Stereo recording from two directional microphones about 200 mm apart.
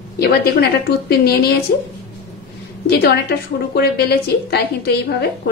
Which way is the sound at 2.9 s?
55° left (ahead or behind).